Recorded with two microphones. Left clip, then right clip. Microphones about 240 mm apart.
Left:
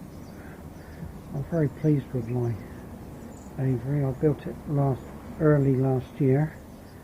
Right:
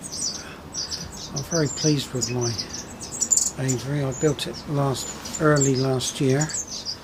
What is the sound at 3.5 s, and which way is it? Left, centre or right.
Speech, centre.